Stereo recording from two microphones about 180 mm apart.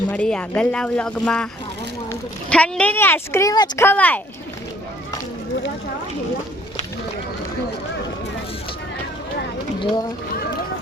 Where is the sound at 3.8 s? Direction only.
10° left (ahead or behind).